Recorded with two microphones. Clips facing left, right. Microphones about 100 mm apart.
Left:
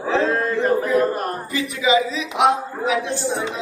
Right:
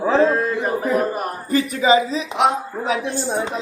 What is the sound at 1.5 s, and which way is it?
Speech, 45° right (ahead or behind).